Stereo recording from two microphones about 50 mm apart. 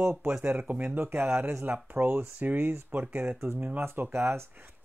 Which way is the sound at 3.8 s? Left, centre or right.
Right.